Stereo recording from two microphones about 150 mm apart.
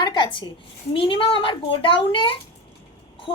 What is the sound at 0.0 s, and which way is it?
A woman's voice, 30° left (ahead or behind).